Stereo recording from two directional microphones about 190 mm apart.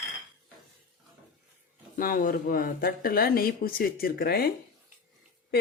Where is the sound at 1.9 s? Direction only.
45° left (ahead or behind).